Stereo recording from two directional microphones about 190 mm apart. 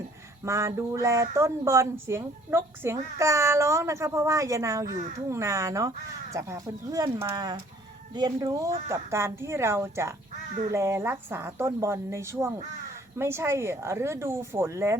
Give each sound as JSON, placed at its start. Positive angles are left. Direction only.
{"t": 0.4, "sound": "a woman's voice", "side_deg": -15}